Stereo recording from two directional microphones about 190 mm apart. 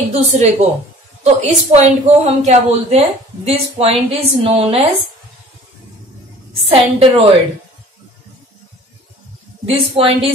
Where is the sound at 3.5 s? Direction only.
30° right (ahead or behind).